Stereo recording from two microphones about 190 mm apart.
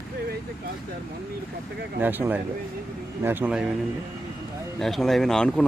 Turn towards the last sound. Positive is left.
turn(degrees=5)  # may be behind; listen again after turning